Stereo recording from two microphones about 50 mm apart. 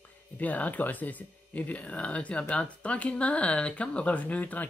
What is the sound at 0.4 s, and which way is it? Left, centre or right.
Speech, left.